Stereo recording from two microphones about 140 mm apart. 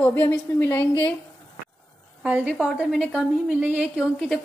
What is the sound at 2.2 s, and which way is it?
A woman's voice, 10° right (ahead or behind).